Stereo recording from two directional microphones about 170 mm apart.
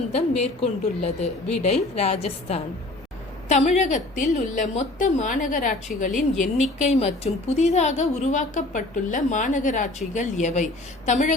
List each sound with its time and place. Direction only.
0.1 s a woman's voice: 35° left (ahead or behind)